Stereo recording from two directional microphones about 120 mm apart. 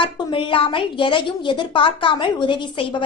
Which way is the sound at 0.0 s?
45° left (ahead or behind).